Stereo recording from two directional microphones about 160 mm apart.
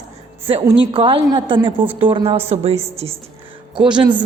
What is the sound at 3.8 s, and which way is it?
Speech, 30° right (ahead or behind).